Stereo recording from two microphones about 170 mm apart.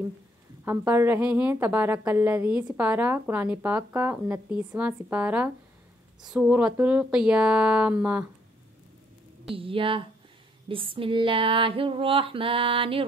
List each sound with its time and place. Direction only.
0.7 s speech: 15° right (ahead or behind)
9.6 s female singing: 30° right (ahead or behind)